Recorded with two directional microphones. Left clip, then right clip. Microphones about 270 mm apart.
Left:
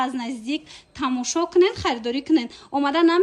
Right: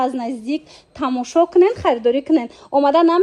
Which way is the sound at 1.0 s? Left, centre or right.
Centre.